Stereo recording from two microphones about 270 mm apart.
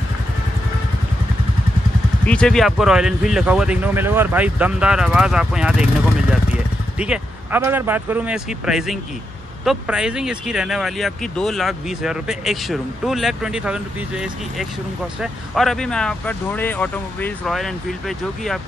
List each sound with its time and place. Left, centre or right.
2.2 s speech: centre